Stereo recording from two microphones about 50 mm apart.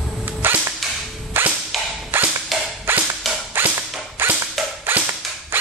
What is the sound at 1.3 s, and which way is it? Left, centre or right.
Whip, right.